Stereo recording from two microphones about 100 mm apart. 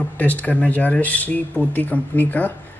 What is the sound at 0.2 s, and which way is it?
Speech, 15° left (ahead or behind).